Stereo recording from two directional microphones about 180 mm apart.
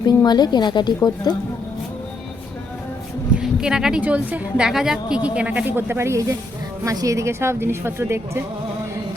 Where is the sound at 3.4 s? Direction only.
5° right (ahead or behind).